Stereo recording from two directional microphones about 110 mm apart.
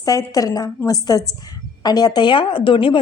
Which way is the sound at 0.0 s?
30° left (ahead or behind).